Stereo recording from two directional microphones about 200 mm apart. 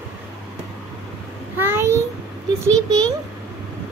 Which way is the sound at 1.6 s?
10° right (ahead or behind).